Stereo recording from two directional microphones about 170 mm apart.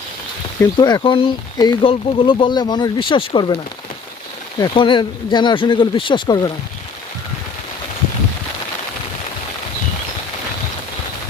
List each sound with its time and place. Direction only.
0.6 s speech: 20° left (ahead or behind)
4.6 s speech: 30° left (ahead or behind)